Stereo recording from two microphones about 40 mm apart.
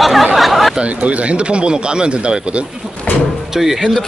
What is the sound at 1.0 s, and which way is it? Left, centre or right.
Speech, right.